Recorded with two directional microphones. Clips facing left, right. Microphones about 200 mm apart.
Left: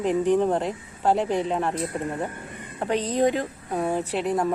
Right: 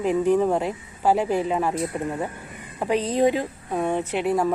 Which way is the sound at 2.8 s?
10° right (ahead or behind).